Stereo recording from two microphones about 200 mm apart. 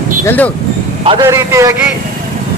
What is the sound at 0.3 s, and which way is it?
Speech, 10° left (ahead or behind).